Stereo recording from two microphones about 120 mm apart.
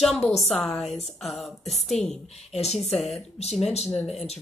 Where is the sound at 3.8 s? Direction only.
Centre (ahead or behind).